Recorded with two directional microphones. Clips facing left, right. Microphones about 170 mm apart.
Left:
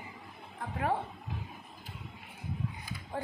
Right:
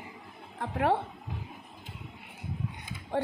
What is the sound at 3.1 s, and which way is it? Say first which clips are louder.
Speech: right 8 dB; 75° right (ahead or behind).